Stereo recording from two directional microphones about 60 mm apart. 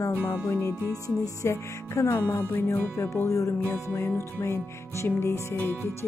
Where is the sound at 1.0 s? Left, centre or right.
Left.